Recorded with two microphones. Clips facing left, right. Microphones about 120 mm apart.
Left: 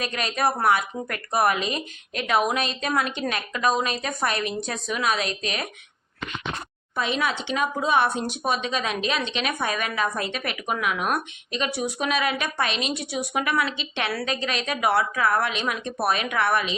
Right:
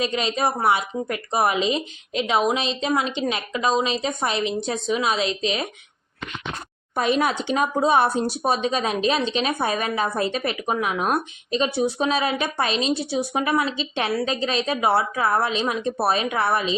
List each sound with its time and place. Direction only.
0.0 s a woman's voice: 25° right (ahead or behind)
6.9 s speech: 45° right (ahead or behind)
14.1 s a woman's voice: 20° right (ahead or behind)